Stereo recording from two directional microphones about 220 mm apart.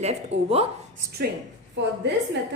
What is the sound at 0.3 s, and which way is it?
Speech, 30° right (ahead or behind).